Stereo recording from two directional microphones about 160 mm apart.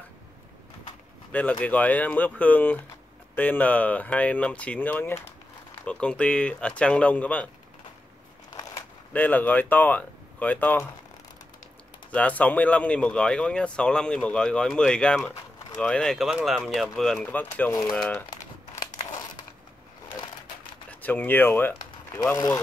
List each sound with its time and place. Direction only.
1.3 s speech: 10° left (ahead or behind)
8.5 s a sound: 20° left (ahead or behind)
9.1 s speech: 10° left (ahead or behind)
12.1 s speech: 10° left (ahead or behind)
18.3 s crumpling: 25° left (ahead or behind)
20.9 s speech: 10° left (ahead or behind)